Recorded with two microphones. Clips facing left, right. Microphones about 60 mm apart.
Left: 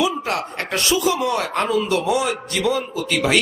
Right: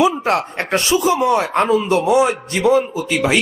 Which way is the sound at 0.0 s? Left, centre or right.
Right.